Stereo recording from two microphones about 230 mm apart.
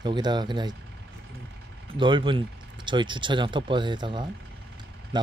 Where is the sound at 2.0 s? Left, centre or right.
Right.